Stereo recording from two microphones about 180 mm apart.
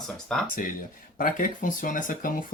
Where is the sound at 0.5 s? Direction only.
50° left (ahead or behind).